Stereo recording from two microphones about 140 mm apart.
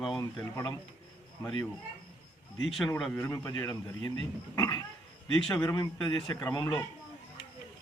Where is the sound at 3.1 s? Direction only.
20° left (ahead or behind).